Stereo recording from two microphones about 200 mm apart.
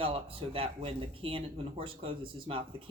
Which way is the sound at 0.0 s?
30° right (ahead or behind).